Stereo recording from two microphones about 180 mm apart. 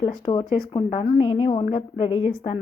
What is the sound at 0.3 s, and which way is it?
A woman's voice, 25° left (ahead or behind).